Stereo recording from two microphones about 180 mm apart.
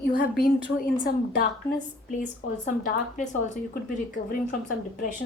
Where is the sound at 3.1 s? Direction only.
45° left (ahead or behind).